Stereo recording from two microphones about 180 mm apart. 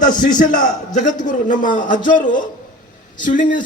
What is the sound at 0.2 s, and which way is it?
A man's voice, 45° left (ahead or behind).